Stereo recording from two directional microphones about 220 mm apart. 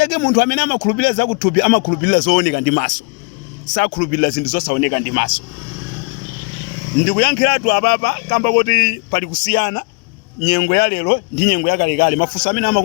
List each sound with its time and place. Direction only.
0.0 s speech: 45° left (ahead or behind)
7.0 s speech: 45° left (ahead or behind)